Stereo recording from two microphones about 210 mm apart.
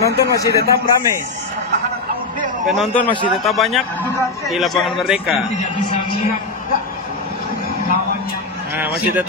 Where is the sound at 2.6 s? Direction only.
Centre (ahead or behind).